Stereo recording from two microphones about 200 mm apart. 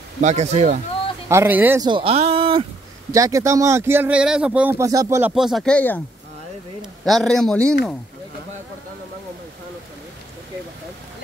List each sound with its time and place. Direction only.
0.2 s speech: 35° right (ahead or behind)
1.3 s speech: 10° right (ahead or behind)
1.9 s speech: 25° right (ahead or behind)
3.1 s speech: 15° right (ahead or behind)
5.3 s a man's voice: centre (ahead or behind)